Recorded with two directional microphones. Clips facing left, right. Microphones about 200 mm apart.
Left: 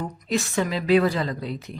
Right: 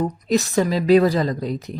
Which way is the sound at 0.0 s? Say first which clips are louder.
Right 6 dB; 40° right (ahead or behind).